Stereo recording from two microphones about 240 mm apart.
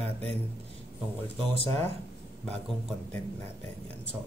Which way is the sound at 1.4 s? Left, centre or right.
Right.